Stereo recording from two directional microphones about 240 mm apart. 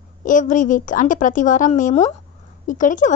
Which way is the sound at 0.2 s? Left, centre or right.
Left.